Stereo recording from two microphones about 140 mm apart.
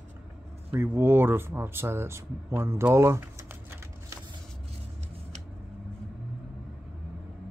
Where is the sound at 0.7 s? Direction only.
15° right (ahead or behind).